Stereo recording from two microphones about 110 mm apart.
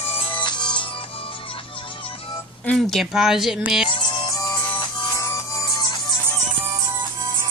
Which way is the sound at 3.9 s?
45° left (ahead or behind).